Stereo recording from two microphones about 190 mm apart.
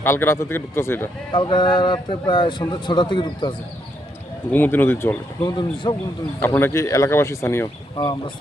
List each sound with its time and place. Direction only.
0.0 s speech: 10° left (ahead or behind)
1.3 s a man's voice: 25° left (ahead or behind)
4.5 s speech: 10° left (ahead or behind)
6.4 s speech: 10° left (ahead or behind)
8.0 s a man's voice: 25° left (ahead or behind)